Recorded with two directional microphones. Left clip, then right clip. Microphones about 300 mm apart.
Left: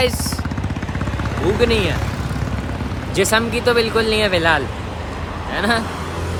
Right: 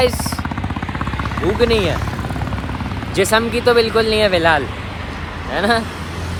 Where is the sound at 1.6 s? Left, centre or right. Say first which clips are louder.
Right 2 dB; centre.